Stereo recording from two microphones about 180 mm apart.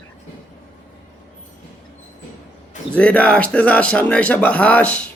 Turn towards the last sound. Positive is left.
turn(degrees=5)  # may be behind; listen again after turning